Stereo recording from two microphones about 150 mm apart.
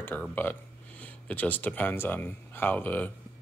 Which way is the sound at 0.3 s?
10° left (ahead or behind).